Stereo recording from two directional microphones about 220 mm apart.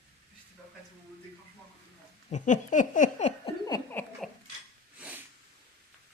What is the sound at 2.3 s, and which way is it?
Laughter, 35° left (ahead or behind).